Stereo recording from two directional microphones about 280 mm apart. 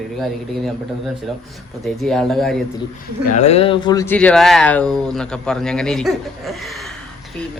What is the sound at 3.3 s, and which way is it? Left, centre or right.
Speech, left.